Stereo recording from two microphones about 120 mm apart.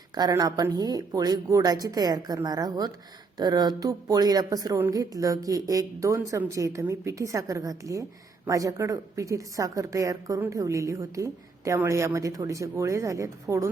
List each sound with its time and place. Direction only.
0.1 s a woman's voice: 30° right (ahead or behind)